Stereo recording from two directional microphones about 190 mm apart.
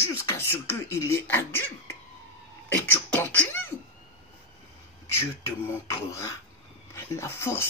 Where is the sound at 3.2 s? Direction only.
10° left (ahead or behind).